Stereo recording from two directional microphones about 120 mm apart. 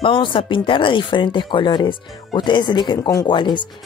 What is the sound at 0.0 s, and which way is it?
Speech, 45° left (ahead or behind).